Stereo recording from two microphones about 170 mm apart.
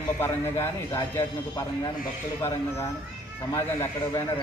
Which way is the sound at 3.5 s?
15° left (ahead or behind).